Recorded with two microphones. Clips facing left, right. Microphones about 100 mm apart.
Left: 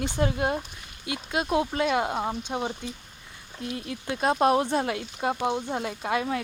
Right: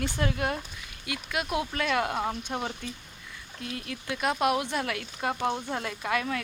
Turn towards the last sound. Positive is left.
turn(degrees=25)  # may be behind; listen again after turning